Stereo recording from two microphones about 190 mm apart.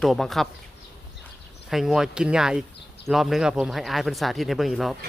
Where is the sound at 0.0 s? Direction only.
Centre (ahead or behind).